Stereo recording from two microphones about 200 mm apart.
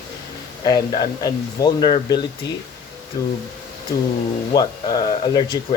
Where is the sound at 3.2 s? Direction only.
15° left (ahead or behind).